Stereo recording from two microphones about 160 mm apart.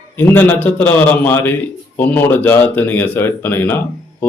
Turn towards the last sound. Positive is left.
turn(degrees=15)  # may be behind; listen again after turning